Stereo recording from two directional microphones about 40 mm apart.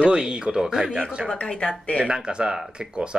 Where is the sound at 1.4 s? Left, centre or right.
Centre.